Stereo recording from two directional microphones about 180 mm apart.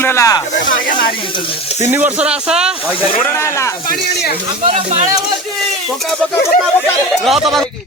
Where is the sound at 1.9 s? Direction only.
10° right (ahead or behind).